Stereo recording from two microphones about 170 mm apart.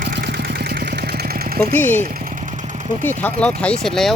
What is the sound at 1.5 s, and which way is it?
Speech, 10° left (ahead or behind).